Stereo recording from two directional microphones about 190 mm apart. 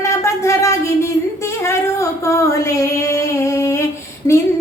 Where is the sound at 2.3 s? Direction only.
15° left (ahead or behind).